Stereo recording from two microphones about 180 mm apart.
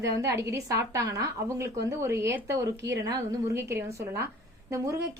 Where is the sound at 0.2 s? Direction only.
15° right (ahead or behind).